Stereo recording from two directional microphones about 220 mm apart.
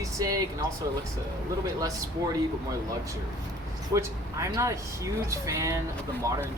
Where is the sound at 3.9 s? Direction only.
15° right (ahead or behind).